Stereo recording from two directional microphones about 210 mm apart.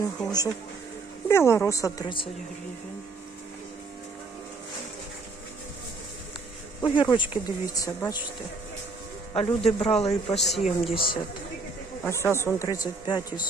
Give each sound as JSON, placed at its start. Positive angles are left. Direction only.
{"t": 0.3, "sound": "speech", "side_deg": 15}
{"t": 6.8, "sound": "speech", "side_deg": 20}
{"t": 9.3, "sound": "speech", "side_deg": 30}
{"t": 12.0, "sound": "speech", "side_deg": 10}